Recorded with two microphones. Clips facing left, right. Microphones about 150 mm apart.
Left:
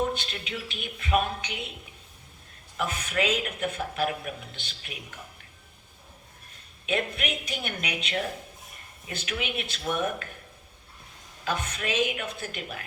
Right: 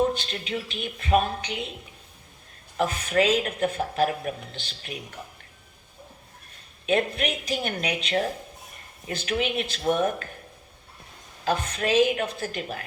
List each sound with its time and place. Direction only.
0.0 s speech: 35° right (ahead or behind)
2.7 s speech: 35° right (ahead or behind)
6.8 s speech: 35° right (ahead or behind)
11.4 s speech: 35° right (ahead or behind)